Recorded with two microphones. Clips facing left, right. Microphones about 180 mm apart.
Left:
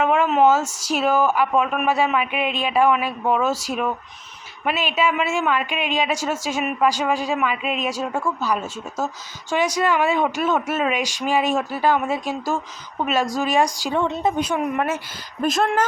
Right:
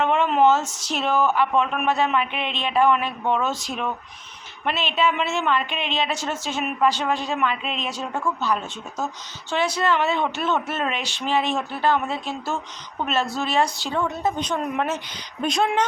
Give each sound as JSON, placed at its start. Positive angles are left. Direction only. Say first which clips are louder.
{"t": 0.0, "sound": "speech", "louder": "left 2 dB", "side_deg": 5}
{"t": 14.0, "sound": "speech", "louder": "left 2 dB", "side_deg": 25}
{"t": 14.3, "sound": "speech", "louder": "left 3 dB", "side_deg": 10}